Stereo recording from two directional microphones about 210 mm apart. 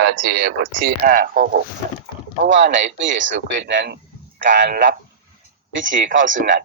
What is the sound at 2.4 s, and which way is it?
Speech, 55° right (ahead or behind).